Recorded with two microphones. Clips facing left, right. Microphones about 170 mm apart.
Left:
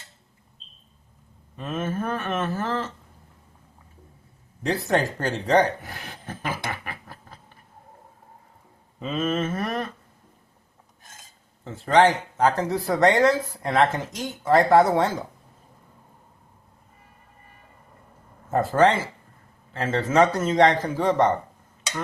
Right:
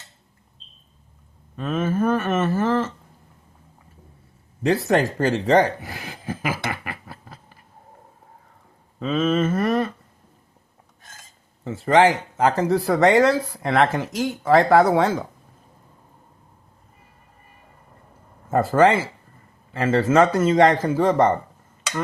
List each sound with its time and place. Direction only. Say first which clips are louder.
1.5 s speech: right 5 dB; centre (ahead or behind)
4.6 s a sound: right 4 dB; centre (ahead or behind)
9.0 s speech: right 5 dB; centre (ahead or behind)
11.6 s speech: right 2 dB; centre (ahead or behind)
18.5 s speech: right 3 dB; centre (ahead or behind)